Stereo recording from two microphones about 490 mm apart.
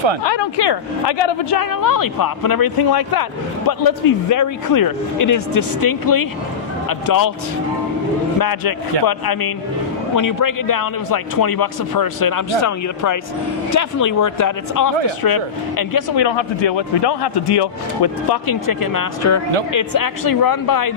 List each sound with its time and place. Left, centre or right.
0.3 s a man's voice: left
8.4 s a man's voice: left
19.2 s a man's voice: left